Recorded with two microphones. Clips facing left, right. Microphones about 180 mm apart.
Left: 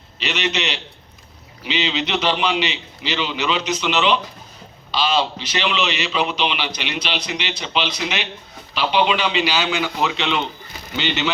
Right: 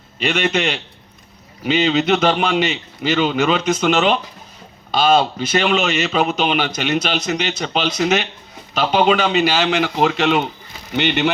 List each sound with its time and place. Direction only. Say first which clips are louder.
0.2 s a man's voice: right 5 dB; 50° right (ahead or behind)